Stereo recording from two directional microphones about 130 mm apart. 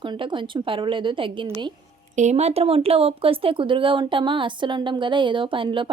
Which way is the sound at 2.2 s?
60° right (ahead or behind).